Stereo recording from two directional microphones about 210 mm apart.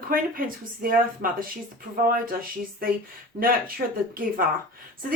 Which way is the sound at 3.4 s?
45° right (ahead or behind).